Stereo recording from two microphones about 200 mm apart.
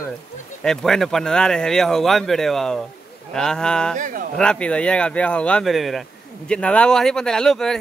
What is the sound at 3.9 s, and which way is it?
Speech, 40° right (ahead or behind).